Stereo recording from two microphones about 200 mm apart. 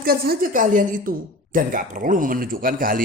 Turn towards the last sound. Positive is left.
turn(degrees=-45)  # may be behind; listen again after turning